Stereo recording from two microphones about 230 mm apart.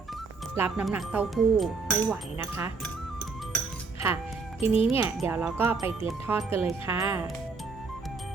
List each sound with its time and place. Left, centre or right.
0.5 s speech: centre
4.6 s a child's voice: left
4.9 s speech: centre